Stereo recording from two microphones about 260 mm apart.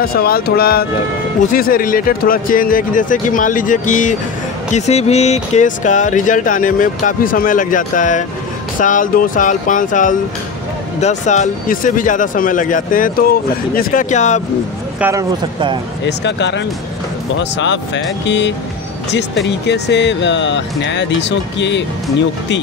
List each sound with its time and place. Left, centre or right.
0.0 s speech: left
15.0 s speech: centre
16.1 s speech: left